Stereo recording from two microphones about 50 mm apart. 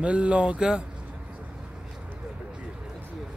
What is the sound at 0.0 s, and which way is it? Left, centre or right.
Speech, right.